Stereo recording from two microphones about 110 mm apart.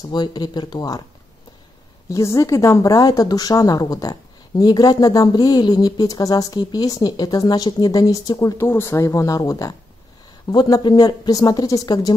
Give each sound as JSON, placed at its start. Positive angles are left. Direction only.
{"t": 0.0, "sound": "speech", "side_deg": 40}
{"t": 2.0, "sound": "speech", "side_deg": 30}
{"t": 8.5, "sound": "speech", "side_deg": 25}